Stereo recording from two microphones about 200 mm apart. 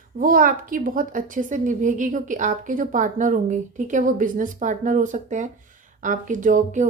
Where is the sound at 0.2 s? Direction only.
45° right (ahead or behind).